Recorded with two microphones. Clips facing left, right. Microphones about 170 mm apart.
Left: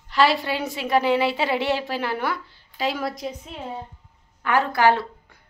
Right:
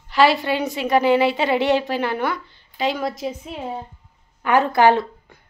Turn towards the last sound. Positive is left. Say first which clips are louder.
# right 4 dB
turn(degrees=-20)  # may be behind; listen again after turning